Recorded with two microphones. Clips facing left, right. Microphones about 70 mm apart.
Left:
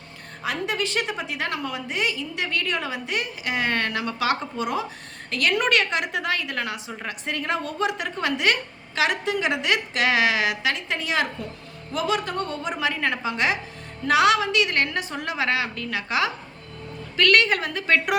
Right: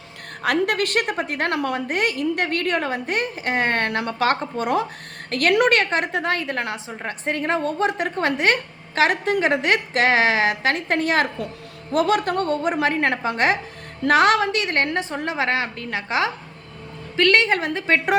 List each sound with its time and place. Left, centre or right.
0.4 s a woman's voice: right